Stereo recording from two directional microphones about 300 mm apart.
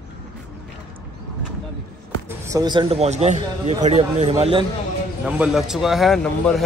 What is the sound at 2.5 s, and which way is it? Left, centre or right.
Speech, centre.